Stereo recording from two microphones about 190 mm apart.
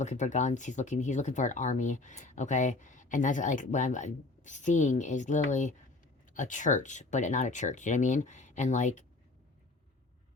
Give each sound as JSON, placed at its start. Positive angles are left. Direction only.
{"t": 0.0, "sound": "speech", "side_deg": 40}